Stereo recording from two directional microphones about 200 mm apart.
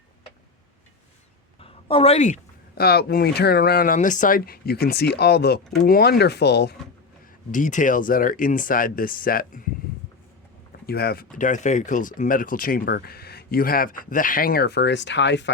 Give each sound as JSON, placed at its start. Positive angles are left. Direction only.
{"t": 1.5, "sound": "a sound", "side_deg": 30}
{"t": 2.8, "sound": "speech", "side_deg": 50}
{"t": 7.5, "sound": "speech", "side_deg": 40}
{"t": 10.8, "sound": "speech", "side_deg": 50}